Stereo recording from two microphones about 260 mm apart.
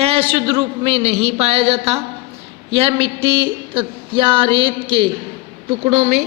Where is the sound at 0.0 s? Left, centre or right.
Right.